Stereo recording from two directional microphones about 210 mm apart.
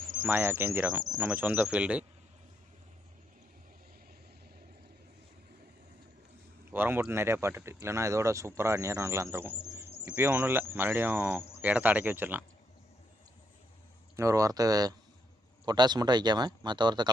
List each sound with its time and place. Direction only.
0.3 s speech: 10° right (ahead or behind)
6.7 s speech: 10° right (ahead or behind)
14.2 s speech: 15° right (ahead or behind)